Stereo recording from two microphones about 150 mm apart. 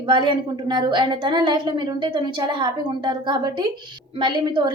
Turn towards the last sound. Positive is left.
turn(degrees=-30)  # may be behind; listen again after turning